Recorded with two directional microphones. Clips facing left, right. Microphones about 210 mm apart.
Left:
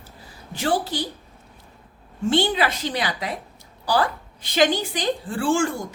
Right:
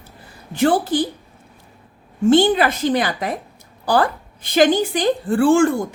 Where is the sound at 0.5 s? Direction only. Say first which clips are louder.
Right 7 dB; 55° right (ahead or behind).